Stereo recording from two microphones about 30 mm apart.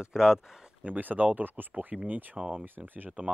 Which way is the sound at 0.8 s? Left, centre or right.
Right.